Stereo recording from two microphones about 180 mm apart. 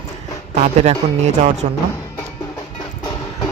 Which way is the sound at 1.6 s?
40° right (ahead or behind).